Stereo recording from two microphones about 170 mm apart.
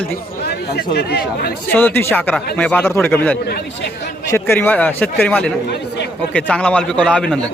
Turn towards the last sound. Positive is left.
turn(degrees=5)  # may be behind; listen again after turning